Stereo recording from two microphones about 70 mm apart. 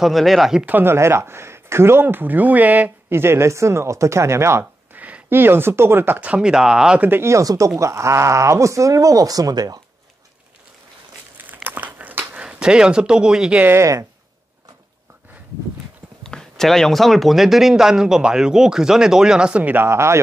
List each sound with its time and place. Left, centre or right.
0.0 s speech: centre
0.7 s speech: right
0.9 s speech: right
3.1 s speech: right
4.9 s speech: right
7.0 s speech: right
7.2 s speech: right
11.3 s crushing: right
12.4 s speech: centre
16.2 s speech: centre
19.7 s speech: right